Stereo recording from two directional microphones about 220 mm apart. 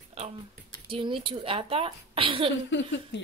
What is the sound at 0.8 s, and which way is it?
Speech, 25° right (ahead or behind).